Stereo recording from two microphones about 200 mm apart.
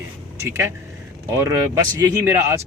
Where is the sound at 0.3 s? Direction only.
15° right (ahead or behind).